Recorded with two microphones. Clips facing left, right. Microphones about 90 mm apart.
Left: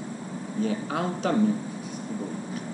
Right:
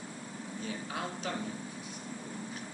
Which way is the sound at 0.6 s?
60° left (ahead or behind).